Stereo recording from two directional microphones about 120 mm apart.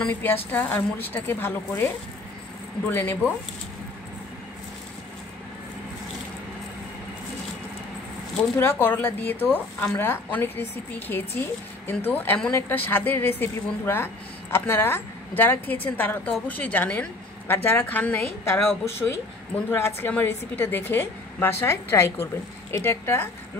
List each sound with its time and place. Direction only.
0.0 s a woman's voice: 15° left (ahead or behind)
2.9 s a woman's voice: 20° left (ahead or behind)
8.5 s a woman's voice: 20° left (ahead or behind)